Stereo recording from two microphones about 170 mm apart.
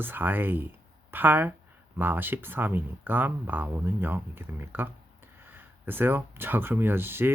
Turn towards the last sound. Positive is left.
turn(degrees=-15)  # may be behind; listen again after turning